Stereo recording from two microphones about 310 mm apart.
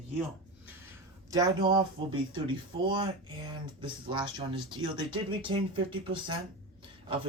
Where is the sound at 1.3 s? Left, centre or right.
Centre.